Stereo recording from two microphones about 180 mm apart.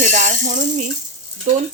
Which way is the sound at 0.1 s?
45° right (ahead or behind).